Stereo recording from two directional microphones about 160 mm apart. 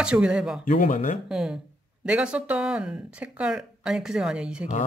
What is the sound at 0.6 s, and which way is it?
Speech, 60° left (ahead or behind).